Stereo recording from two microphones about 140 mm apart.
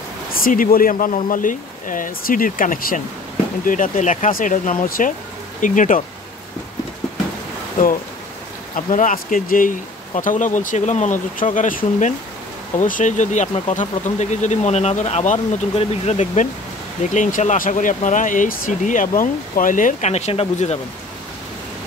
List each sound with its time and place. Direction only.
0.4 s speech: 85° left
5.6 s speech: 65° left (ahead or behind)
8.7 s speech: 75° left (ahead or behind)
10.1 s speech: 65° left (ahead or behind); by 20.8 s 50° left (ahead or behind)